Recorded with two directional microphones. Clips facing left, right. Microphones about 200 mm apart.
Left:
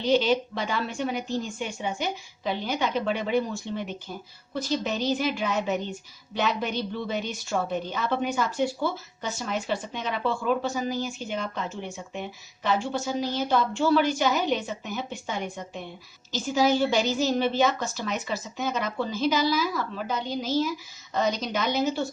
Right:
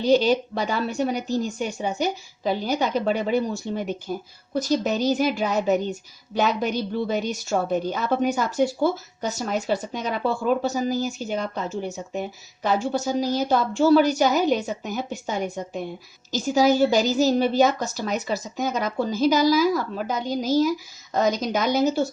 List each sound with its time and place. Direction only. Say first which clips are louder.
0.0 s a woman's voice: right 4 dB; 40° right (ahead or behind)